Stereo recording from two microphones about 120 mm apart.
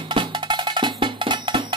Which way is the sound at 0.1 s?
40° right (ahead or behind).